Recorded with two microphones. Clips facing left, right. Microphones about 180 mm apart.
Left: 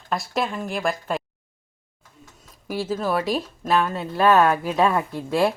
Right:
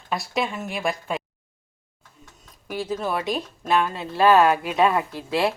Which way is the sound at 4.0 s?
25° right (ahead or behind).